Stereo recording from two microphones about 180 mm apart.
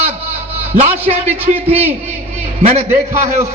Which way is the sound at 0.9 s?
10° right (ahead or behind).